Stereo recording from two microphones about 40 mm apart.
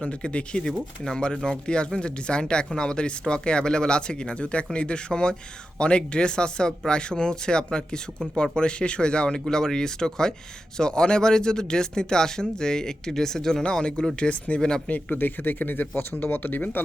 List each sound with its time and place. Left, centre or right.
0.0 s speech: left
0.7 s speech: centre
13.7 s speech: left
14.8 s a man's voice: left